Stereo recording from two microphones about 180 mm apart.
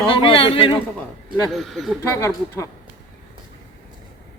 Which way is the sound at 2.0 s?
15° left (ahead or behind).